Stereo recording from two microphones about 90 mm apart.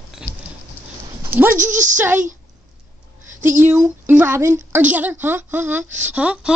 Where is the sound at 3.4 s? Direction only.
25° right (ahead or behind).